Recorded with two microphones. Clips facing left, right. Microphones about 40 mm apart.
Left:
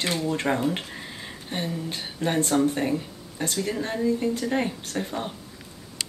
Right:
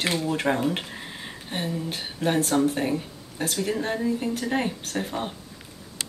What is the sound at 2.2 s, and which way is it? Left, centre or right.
Speech, centre.